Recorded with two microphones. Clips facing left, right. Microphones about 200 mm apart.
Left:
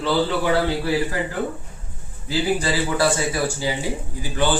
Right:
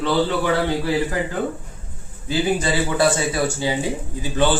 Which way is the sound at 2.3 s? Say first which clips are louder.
Right 1 dB; 20° right (ahead or behind).